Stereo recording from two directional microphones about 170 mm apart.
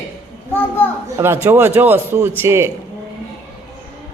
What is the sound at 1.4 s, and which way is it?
A woman's voice, 10° right (ahead or behind).